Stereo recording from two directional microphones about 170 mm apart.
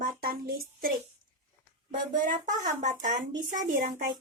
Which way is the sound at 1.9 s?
50° right (ahead or behind).